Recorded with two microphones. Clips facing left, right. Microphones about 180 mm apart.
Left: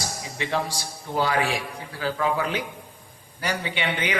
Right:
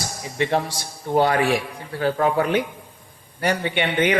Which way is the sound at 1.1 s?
55° right (ahead or behind).